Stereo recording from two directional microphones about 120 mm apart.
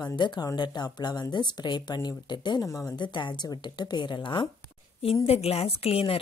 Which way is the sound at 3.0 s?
40° left (ahead or behind).